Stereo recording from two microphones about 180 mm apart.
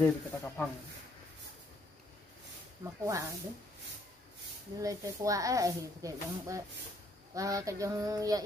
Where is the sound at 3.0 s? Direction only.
15° right (ahead or behind).